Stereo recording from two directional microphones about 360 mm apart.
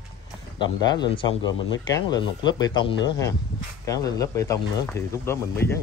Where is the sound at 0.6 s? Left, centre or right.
Centre.